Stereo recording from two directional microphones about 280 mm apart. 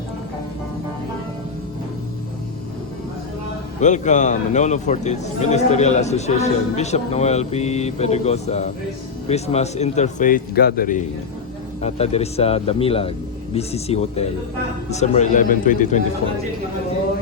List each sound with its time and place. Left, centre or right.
3.8 s a man's voice: left